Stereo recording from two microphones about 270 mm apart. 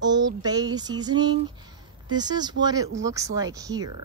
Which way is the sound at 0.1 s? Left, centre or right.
Centre.